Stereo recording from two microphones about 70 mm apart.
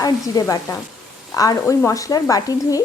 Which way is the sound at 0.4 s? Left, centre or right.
Left.